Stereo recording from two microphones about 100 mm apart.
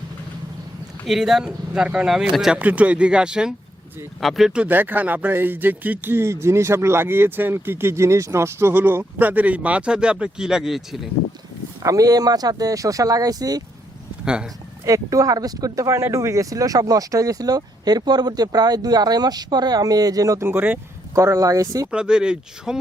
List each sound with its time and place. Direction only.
1.0 s speech: 5° right (ahead or behind)
11.8 s speech: 35° right (ahead or behind)
14.8 s speech: 35° right (ahead or behind)
20.5 s speech: 20° right (ahead or behind)
21.2 s speech: 35° right (ahead or behind)
21.9 s speech: 10° right (ahead or behind)